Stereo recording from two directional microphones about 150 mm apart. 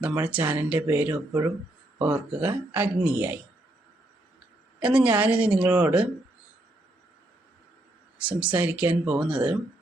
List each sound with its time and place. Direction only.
0.0 s speech: 10° right (ahead or behind)
4.8 s speech: 10° right (ahead or behind)
8.2 s speech: 10° right (ahead or behind)